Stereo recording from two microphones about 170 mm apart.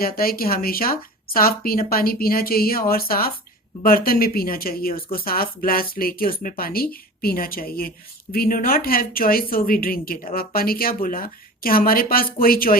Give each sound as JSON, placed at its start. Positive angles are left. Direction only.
{"t": 0.0, "sound": "a woman's voice", "side_deg": 60}